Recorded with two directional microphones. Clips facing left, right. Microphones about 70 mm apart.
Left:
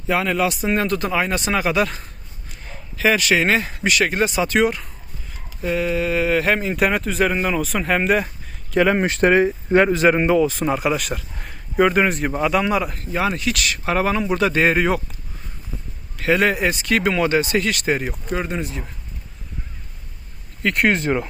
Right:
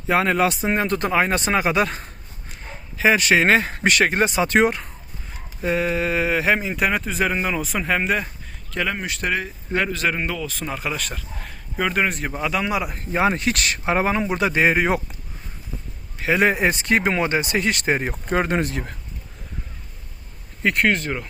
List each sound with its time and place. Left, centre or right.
0.1 s speech: right; by 8.3 s centre
8.7 s speech: left
9.0 s speech: left; by 10.8 s centre
10.8 s speech: centre
12.9 s speech: right
13.8 s speech: right
16.1 s speech: centre; by 18.4 s right
18.4 s speech: right
20.8 s speech: left